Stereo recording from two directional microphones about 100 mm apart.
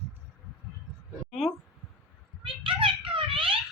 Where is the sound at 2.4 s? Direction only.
60° right (ahead or behind).